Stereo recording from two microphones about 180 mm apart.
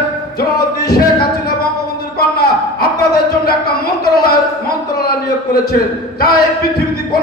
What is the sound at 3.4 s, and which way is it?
Speech, 60° left (ahead or behind).